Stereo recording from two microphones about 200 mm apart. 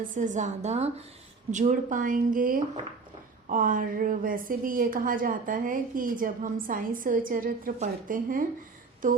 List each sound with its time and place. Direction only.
0.0 s a woman's voice: 40° right (ahead or behind)